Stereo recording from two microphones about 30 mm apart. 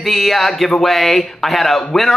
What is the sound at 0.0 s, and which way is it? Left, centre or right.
Speech, centre.